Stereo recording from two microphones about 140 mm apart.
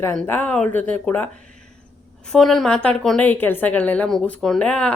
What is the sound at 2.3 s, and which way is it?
A woman's voice, 5° left (ahead or behind).